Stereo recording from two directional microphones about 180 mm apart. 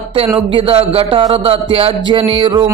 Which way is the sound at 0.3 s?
30° right (ahead or behind).